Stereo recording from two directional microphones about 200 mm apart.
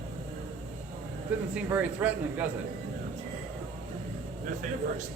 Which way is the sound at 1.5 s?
10° right (ahead or behind).